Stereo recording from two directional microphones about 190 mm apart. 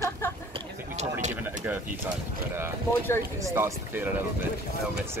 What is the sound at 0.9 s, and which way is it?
Speech, 40° right (ahead or behind).